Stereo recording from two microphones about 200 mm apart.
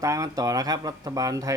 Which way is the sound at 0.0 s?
15° right (ahead or behind).